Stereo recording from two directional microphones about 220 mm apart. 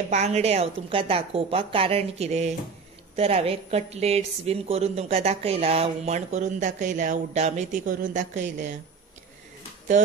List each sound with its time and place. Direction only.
0.1 s a woman's voice: 30° right (ahead or behind)